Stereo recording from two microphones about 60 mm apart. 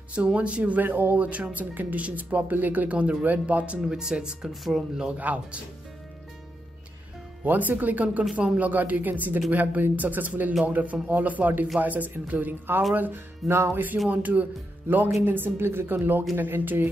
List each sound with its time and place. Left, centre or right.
0.1 s speech: right
0.8 s a woman's voice: right
1.1 s speech: right; by 5.1 s centre
5.1 s speech: right
7.4 s a woman's voice: right
13.5 s music: right
14.0 s a woman's voice: right